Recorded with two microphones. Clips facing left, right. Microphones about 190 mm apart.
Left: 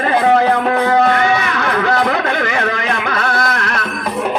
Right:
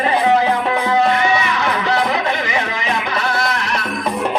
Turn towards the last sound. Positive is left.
turn(degrees=55)  # may be behind; listen again after turning